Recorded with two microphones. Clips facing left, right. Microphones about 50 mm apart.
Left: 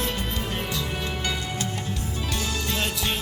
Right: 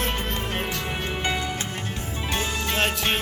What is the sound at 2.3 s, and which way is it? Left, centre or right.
Music, right.